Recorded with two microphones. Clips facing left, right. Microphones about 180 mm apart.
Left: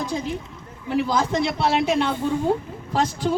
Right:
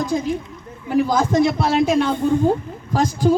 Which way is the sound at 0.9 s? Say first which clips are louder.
Right 5 dB; 45° right (ahead or behind).